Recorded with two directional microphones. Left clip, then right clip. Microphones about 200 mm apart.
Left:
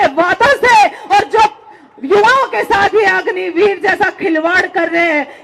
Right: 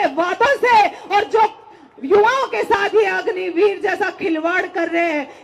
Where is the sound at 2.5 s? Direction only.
10° left (ahead or behind).